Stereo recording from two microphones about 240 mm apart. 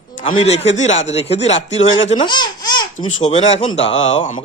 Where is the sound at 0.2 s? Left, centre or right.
Left.